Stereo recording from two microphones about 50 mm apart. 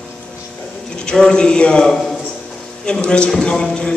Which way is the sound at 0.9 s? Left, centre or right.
Centre.